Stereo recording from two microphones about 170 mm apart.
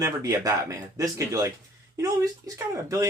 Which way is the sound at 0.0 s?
20° right (ahead or behind).